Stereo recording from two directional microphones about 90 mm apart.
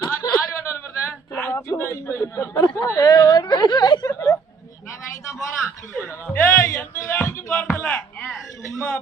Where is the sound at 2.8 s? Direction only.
45° left (ahead or behind).